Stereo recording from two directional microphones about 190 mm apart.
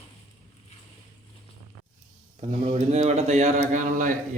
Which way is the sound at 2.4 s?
30° right (ahead or behind).